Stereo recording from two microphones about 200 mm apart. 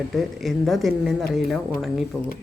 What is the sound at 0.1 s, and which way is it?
Speech, centre (ahead or behind).